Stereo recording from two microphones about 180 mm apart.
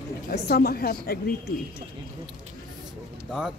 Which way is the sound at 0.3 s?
60° left (ahead or behind).